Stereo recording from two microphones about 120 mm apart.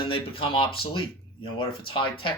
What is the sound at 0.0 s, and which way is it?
A man's voice, 50° left (ahead or behind).